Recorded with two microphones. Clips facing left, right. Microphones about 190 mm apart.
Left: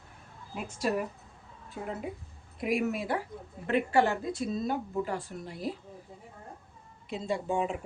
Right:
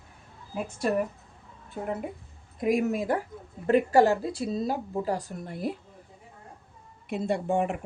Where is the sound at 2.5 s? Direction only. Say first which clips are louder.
Right 4 dB; 45° right (ahead or behind).